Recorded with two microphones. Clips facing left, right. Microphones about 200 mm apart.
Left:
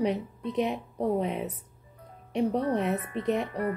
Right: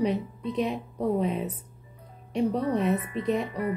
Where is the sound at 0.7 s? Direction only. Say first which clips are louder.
Right 1 dB; 20° left (ahead or behind).